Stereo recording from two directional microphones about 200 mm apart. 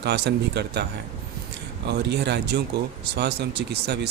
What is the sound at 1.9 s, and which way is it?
Speech, 55° right (ahead or behind).